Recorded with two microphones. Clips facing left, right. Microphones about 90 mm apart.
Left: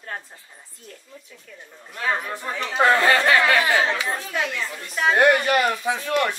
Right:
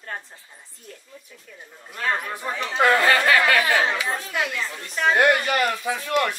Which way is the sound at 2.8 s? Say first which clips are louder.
Left 1 dB; 25° left (ahead or behind).